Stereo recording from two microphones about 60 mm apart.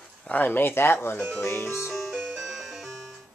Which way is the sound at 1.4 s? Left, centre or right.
Left.